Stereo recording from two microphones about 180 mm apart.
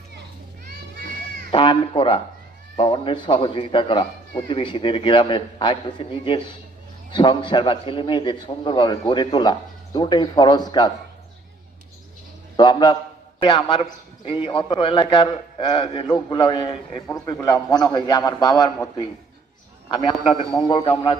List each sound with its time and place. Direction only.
1.5 s a man's voice: 30° left (ahead or behind)
12.5 s a man's voice: 25° left (ahead or behind)
19.9 s a man's voice: 25° left (ahead or behind)